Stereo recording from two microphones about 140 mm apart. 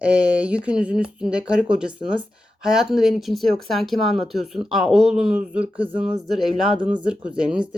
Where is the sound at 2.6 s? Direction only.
5° right (ahead or behind).